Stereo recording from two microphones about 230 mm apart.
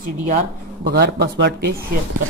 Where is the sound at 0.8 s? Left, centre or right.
Right.